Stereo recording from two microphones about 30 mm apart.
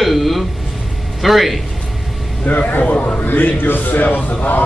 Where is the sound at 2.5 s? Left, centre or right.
Left.